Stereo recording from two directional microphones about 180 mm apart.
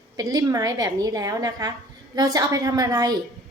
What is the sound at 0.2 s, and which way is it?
A woman's voice, 20° right (ahead or behind).